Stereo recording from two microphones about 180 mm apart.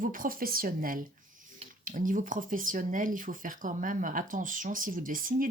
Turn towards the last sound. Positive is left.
turn(degrees=-50)  # may be behind; listen again after turning